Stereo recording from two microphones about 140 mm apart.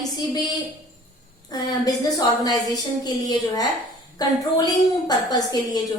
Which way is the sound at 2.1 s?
25° left (ahead or behind).